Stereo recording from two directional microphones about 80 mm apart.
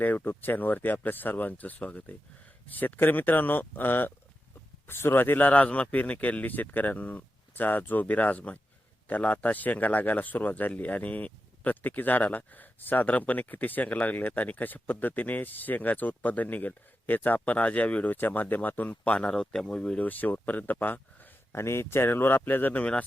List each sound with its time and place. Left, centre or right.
0.0 s speech: left
21.5 s speech: left